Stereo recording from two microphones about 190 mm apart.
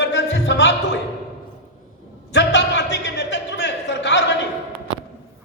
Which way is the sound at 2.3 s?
65° left (ahead or behind).